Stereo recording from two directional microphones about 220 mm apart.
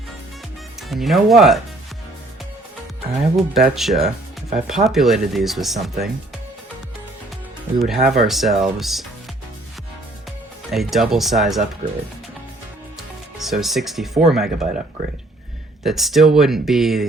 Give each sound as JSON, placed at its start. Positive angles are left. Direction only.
{"t": 0.8, "sound": "speech", "side_deg": 0}
{"t": 3.5, "sound": "speech", "side_deg": 0}
{"t": 7.8, "sound": "speech", "side_deg": 0}
{"t": 10.7, "sound": "speech", "side_deg": 0}
{"t": 11.8, "sound": "speech", "side_deg": -35}
{"t": 13.4, "sound": "speech", "side_deg": 0}
{"t": 15.8, "sound": "speech", "side_deg": 0}